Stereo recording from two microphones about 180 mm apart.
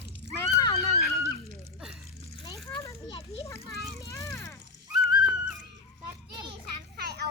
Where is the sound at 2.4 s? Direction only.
20° left (ahead or behind).